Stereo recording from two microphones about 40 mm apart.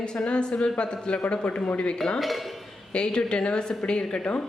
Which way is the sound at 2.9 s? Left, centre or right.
Left.